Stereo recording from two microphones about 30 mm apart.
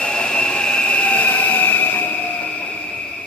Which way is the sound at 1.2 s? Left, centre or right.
Left.